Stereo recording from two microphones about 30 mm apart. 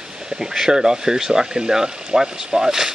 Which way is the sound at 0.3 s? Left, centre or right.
Centre.